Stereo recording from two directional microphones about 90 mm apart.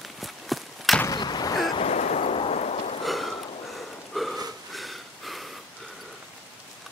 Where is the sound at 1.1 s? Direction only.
50° left (ahead or behind).